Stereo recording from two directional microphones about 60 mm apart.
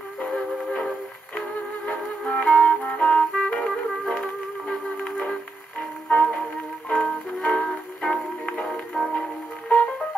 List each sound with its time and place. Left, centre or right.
0.2 s music: centre
8.6 s music: centre